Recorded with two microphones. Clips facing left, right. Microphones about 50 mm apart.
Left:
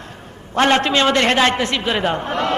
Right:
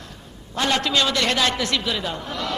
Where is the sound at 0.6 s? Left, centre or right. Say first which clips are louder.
Left 6 dB; left.